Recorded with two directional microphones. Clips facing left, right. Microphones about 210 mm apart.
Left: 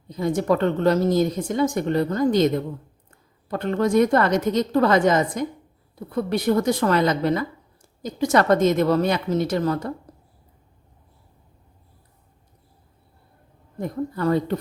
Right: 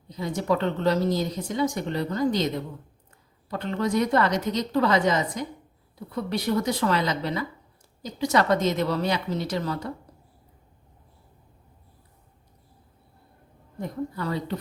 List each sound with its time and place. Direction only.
0.1 s a woman's voice: 50° left (ahead or behind)
3.5 s a woman's voice: 50° left (ahead or behind)
14.2 s a woman's voice: 50° left (ahead or behind)